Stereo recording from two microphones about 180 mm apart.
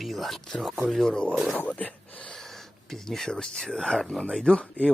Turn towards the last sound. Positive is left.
turn(degrees=5)  # may be behind; listen again after turning